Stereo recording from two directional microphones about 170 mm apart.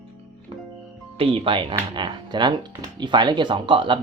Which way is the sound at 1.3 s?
30° right (ahead or behind).